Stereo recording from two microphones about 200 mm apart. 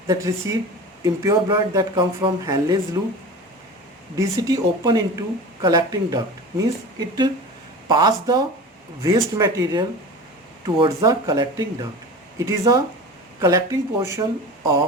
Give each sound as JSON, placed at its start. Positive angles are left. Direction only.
{"t": 0.1, "sound": "speech", "side_deg": -15}
{"t": 4.2, "sound": "speech", "side_deg": -15}
{"t": 7.9, "sound": "speech", "side_deg": -20}